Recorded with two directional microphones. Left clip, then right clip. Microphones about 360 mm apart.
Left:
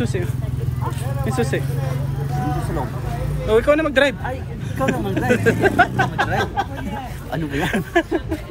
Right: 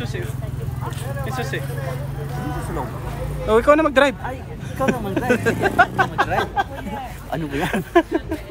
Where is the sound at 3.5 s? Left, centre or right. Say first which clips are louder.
Right 1 dB; centre.